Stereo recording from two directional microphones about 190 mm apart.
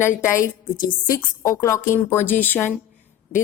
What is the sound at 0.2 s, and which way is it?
A woman's voice, 15° left (ahead or behind).